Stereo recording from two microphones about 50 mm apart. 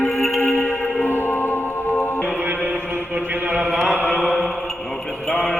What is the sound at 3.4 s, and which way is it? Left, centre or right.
Chant, right.